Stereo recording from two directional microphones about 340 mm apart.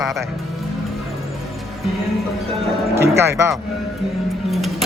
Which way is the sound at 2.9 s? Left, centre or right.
Centre.